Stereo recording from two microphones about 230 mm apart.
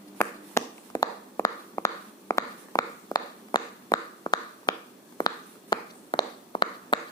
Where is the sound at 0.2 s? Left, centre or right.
Centre.